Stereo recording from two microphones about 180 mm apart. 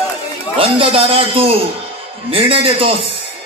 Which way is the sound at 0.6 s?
30° right (ahead or behind).